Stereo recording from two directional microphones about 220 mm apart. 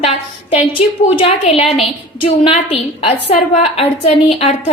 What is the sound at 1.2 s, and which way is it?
A woman's voice, 25° left (ahead or behind).